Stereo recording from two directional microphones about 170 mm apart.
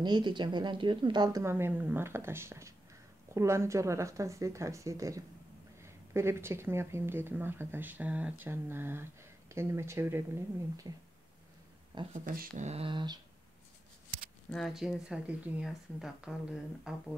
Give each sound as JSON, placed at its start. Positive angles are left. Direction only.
{"t": 0.0, "sound": "a woman's voice", "side_deg": -25}
{"t": 12.1, "sound": "speech", "side_deg": -55}
{"t": 14.5, "sound": "speech", "side_deg": 0}